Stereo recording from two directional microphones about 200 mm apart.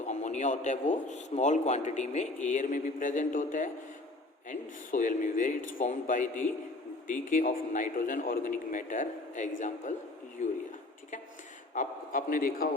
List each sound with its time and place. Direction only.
0.0 s a sound: 35° left (ahead or behind)
1.0 s a man's voice: 35° left (ahead or behind)
11.7 s a man's voice: 40° left (ahead or behind)